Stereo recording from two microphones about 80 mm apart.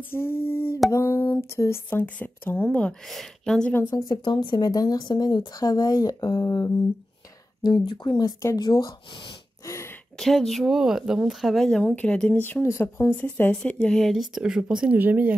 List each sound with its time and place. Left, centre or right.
0.1 s a sound: left
1.9 s speech: left
3.9 s speech: left
7.6 s speech: left
9.7 s a sound: left
10.1 s speech: centre
11.8 s speech: centre
12.4 s speech: left
13.1 s speech: left
13.5 s speech: centre; by 15.3 s right